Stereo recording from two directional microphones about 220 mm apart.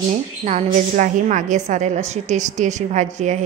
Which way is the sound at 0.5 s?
30° right (ahead or behind).